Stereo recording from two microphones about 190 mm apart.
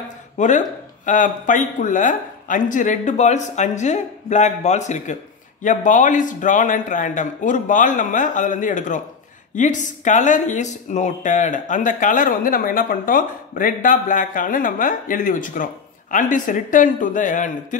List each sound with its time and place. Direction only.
0.4 s speech: 40° left (ahead or behind)